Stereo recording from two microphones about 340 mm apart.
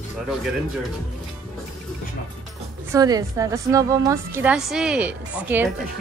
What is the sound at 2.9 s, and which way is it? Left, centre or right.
A woman's voice, centre.